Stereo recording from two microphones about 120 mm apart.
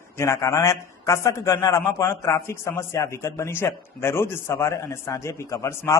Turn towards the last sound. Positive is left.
turn(degrees=25)  # may be behind; listen again after turning